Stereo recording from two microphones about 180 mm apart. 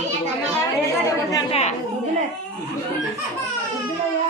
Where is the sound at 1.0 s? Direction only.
20° left (ahead or behind).